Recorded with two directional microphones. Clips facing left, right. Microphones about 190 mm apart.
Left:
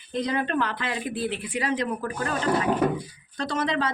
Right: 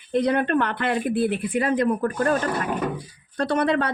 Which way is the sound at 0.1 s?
65° right (ahead or behind).